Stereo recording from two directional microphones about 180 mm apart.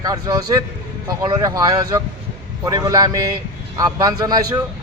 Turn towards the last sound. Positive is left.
turn(degrees=-20)  # may be behind; listen again after turning